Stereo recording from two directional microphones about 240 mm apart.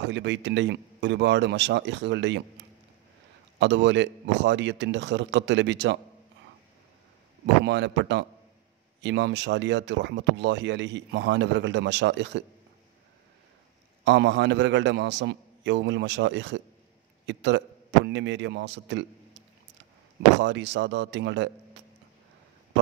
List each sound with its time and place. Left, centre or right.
0.0 s speech: right
3.5 s speech: right
7.6 s speech: right
14.0 s speech: right
20.3 s speech: right